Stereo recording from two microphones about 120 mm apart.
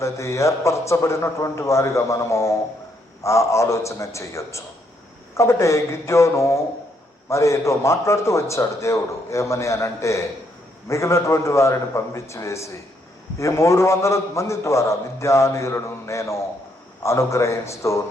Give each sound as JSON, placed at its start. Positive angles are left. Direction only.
{"t": 0.0, "sound": "a man's voice", "side_deg": 25}